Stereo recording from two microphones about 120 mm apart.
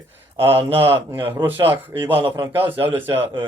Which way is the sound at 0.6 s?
50° right (ahead or behind).